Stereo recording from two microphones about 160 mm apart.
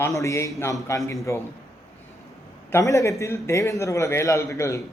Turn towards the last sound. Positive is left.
turn(degrees=20)  # may be behind; listen again after turning